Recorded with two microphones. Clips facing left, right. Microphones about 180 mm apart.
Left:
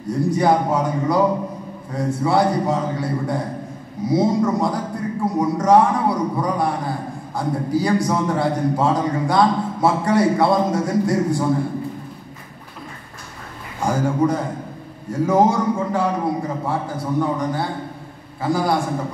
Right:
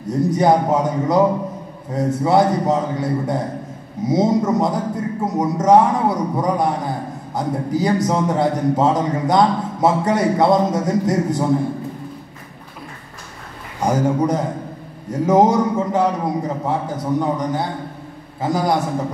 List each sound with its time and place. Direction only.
0.0 s a man's voice: 20° right (ahead or behind)
13.7 s a man's voice: 20° right (ahead or behind)